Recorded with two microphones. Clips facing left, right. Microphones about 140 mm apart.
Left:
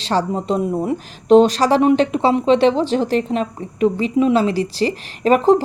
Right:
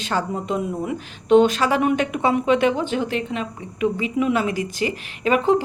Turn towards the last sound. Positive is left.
turn(degrees=40)  # may be behind; listen again after turning